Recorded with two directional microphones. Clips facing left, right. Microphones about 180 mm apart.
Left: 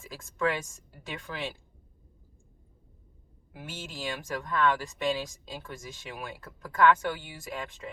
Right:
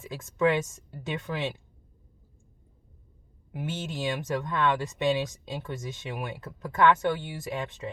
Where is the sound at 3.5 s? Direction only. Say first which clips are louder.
Right 8 dB; 20° right (ahead or behind).